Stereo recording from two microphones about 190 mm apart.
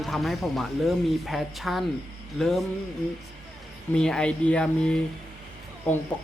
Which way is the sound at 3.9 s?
5° left (ahead or behind).